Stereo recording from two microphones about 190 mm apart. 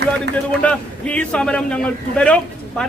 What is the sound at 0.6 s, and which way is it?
A man's voice, 5° left (ahead or behind).